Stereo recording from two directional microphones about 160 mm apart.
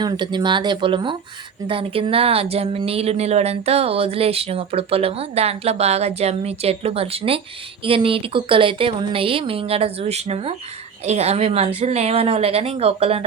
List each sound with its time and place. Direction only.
0.0 s speech: 25° right (ahead or behind)